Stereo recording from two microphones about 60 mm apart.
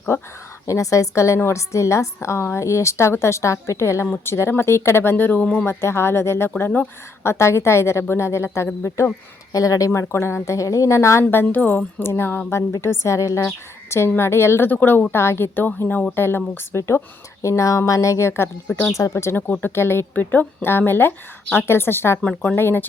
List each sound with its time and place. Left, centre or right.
0.1 s a woman's voice: left
0.7 s a woman's voice: left
5.6 s a woman's voice: left
9.5 s a woman's voice: left
11.3 s speech: left
12.0 s a woman's voice: left
14.2 s a woman's voice: left
14.7 s speech: left
17.4 s a woman's voice: left
18.4 s speech: left
18.9 s a woman's voice: left